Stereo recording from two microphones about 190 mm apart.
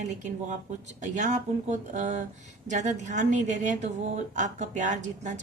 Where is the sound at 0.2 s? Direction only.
40° right (ahead or behind).